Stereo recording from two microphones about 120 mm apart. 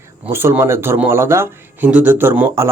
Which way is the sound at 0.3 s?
20° right (ahead or behind).